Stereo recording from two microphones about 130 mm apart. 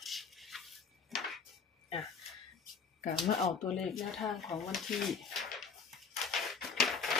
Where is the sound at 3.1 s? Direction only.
Centre (ahead or behind).